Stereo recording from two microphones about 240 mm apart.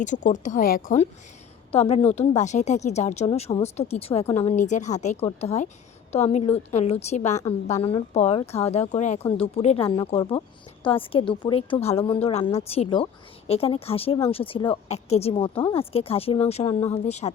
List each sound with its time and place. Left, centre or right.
0.0 s a woman's voice: left